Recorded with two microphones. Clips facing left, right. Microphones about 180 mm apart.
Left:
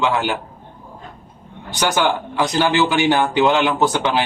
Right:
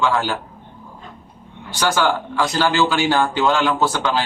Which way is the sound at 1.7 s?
20° left (ahead or behind).